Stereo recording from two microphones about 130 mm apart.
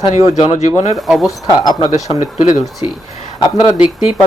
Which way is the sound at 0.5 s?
60° left (ahead or behind).